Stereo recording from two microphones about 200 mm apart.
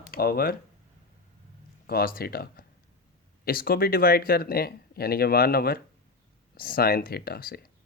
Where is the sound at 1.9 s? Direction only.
50° left (ahead or behind).